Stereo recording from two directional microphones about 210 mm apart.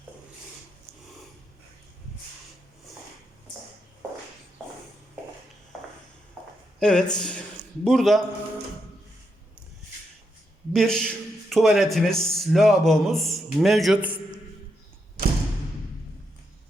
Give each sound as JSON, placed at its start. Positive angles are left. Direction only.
{"t": 6.7, "sound": "a man's voice", "side_deg": 5}
{"t": 10.7, "sound": "a man's voice", "side_deg": 0}